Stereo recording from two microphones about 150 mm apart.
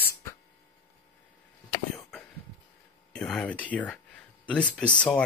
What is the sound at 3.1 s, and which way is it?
Speech, 5° left (ahead or behind).